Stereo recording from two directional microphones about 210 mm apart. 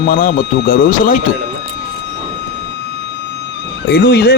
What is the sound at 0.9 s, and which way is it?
Speech, 40° left (ahead or behind).